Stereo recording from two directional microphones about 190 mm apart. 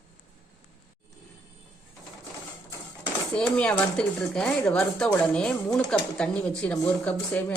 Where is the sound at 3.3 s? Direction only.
5° left (ahead or behind).